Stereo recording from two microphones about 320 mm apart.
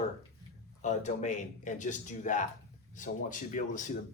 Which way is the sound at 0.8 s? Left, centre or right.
Left.